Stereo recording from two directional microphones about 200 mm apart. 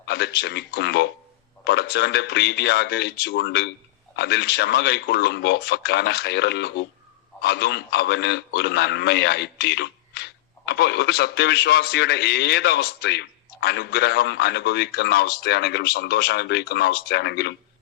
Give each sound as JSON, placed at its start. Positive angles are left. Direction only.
{"t": 0.1, "sound": "a man's voice", "side_deg": 55}